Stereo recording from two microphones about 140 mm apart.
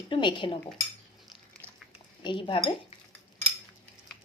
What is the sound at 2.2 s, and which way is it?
Speech, 35° left (ahead or behind).